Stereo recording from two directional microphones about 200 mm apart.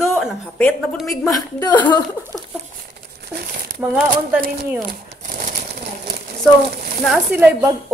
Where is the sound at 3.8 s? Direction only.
5° right (ahead or behind).